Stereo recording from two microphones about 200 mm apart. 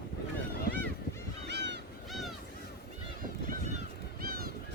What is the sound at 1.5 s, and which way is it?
Honk, 60° right (ahead or behind).